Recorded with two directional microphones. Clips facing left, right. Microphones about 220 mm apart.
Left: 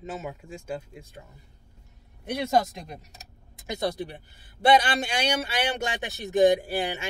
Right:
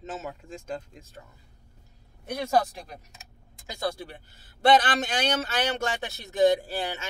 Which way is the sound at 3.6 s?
20° left (ahead or behind).